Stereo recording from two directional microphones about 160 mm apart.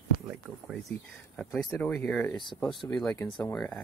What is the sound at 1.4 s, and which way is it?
Speech, 5° left (ahead or behind).